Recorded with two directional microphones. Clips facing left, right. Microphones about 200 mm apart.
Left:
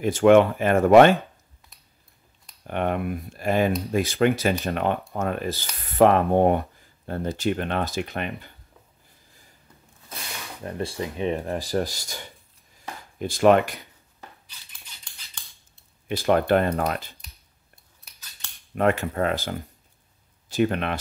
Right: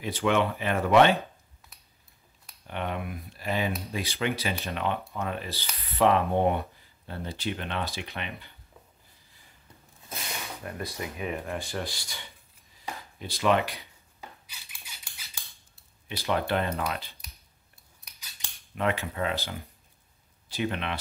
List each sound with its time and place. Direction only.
0.0 s speech: 50° left (ahead or behind)
2.6 s speech: 50° left (ahead or behind)
10.6 s speech: 30° left (ahead or behind); by 13.8 s 50° left (ahead or behind)
14.5 s scissors: 10° right (ahead or behind)
16.1 s speech: 50° left (ahead or behind)
18.4 s scissors: 15° right (ahead or behind)
18.8 s speech: 50° left (ahead or behind)